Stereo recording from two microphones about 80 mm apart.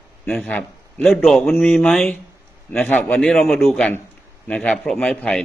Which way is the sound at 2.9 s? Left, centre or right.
Centre.